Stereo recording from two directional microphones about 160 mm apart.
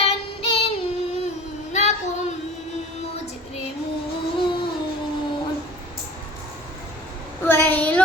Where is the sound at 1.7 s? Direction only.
45° left (ahead or behind).